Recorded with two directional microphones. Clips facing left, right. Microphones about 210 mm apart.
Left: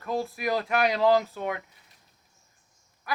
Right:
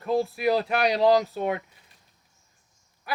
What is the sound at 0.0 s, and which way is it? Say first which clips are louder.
A woman's voice: right 5 dB; 30° right (ahead or behind).